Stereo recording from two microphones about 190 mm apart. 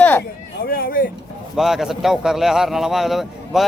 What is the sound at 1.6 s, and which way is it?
A man's voice, centre (ahead or behind).